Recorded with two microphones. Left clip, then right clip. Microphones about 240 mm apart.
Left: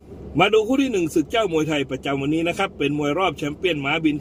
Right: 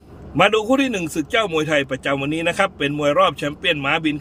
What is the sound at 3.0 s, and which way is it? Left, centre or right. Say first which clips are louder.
Speech: right 9 dB; right.